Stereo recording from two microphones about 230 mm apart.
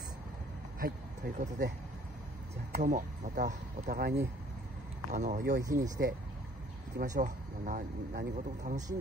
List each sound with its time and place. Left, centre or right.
0.7 s speech: right
2.7 s speech: right
5.1 s speech: right
5.6 s speech: centre
7.2 s speech: right